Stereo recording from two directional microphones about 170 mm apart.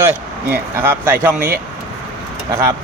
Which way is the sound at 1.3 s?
55° right (ahead or behind).